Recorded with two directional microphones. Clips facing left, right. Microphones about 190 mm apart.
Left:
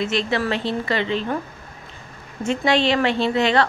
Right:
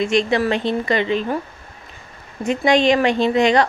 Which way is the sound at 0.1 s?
15° right (ahead or behind).